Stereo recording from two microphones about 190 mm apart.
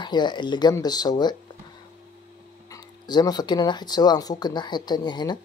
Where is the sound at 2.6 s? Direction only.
20° left (ahead or behind).